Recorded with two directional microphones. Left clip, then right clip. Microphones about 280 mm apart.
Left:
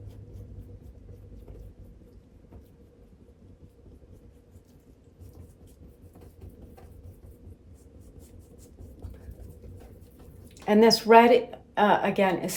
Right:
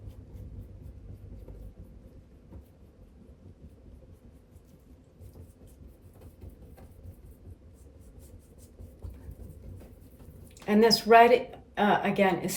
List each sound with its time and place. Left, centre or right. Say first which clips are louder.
10.7 s speech: left 2 dB; centre